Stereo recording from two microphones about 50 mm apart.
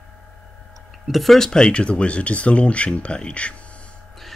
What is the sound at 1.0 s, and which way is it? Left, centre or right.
Speech, centre.